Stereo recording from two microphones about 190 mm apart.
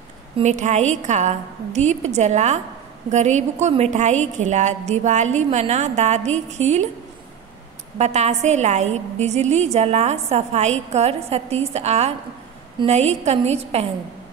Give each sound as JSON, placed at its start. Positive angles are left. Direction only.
{"t": 0.4, "sound": "a woman's voice", "side_deg": -40}
{"t": 8.0, "sound": "a woman's voice", "side_deg": -35}